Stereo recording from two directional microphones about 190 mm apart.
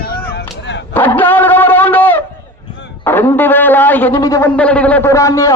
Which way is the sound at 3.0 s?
10° left (ahead or behind).